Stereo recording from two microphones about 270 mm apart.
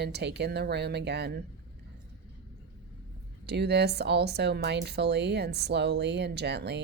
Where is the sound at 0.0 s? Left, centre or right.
Right.